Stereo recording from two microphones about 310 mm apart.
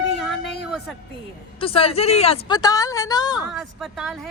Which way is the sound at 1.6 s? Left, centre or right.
Centre.